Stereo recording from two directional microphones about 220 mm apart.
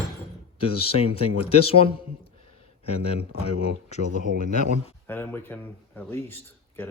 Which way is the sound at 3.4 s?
30° left (ahead or behind).